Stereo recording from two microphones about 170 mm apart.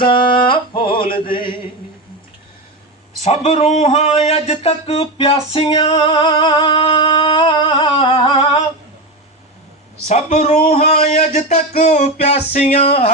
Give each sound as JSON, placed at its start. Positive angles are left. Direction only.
{"t": 0.1, "sound": "a sound", "side_deg": 30}
{"t": 1.0, "sound": "chant", "side_deg": 60}
{"t": 3.2, "sound": "speech", "side_deg": 40}
{"t": 10.1, "sound": "speech", "side_deg": 40}